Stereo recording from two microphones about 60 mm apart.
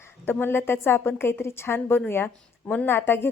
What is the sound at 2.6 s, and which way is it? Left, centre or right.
Speech, left.